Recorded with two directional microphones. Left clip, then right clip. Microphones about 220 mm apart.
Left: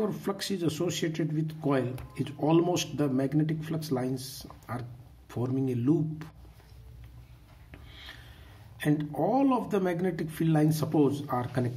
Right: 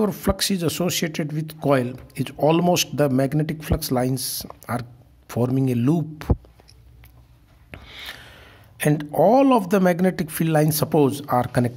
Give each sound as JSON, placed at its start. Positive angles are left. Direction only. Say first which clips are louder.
{"t": 0.0, "sound": "speech", "louder": "right 9 dB", "side_deg": -50}
{"t": 7.7, "sound": "speech", "louder": "right 11 dB", "side_deg": -50}